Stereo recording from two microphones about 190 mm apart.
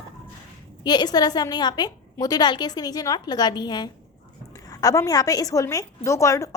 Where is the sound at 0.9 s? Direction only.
20° left (ahead or behind).